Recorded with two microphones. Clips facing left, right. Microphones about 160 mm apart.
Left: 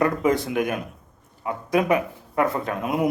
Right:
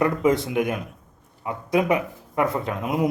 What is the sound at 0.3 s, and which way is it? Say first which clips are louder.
A man's voice: right 1 dB; 20° right (ahead or behind).